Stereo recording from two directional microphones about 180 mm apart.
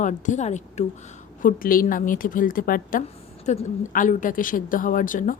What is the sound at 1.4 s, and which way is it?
Speech, 50° left (ahead or behind).